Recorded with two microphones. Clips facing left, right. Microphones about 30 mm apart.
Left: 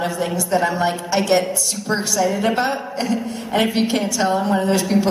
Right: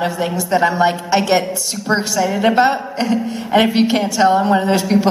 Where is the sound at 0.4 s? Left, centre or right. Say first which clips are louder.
Right 5 dB; right.